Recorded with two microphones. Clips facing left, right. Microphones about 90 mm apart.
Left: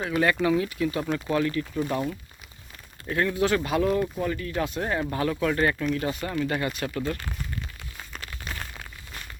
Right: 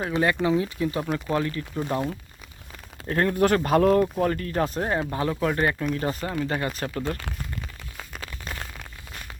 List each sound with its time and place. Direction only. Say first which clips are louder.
0.0 s speech: even; 25° right (ahead or behind)
3.1 s speech: right 3 dB; 45° right (ahead or behind); by 5.7 s 25° right (ahead or behind)
5.9 s speech: even; 35° right (ahead or behind)
6.2 s speech: even; 25° right (ahead or behind)